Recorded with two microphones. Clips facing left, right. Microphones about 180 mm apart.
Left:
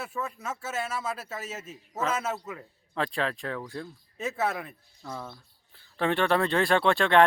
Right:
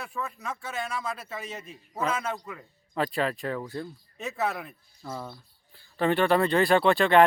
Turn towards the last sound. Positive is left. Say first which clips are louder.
# right 2 dB
turn(degrees=0)  # may be behind; listen again after turning